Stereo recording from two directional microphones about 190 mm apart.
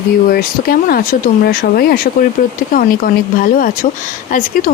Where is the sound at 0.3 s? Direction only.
50° left (ahead or behind).